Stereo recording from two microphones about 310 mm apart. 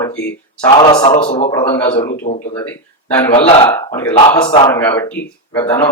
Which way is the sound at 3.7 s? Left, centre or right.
Centre.